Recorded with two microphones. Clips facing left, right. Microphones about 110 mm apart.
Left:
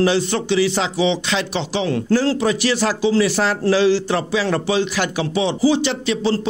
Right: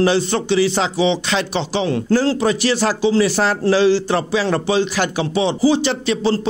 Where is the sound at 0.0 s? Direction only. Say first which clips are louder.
Right 1 dB; 35° right (ahead or behind).